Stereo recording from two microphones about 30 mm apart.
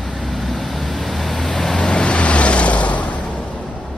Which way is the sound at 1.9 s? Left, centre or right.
Left.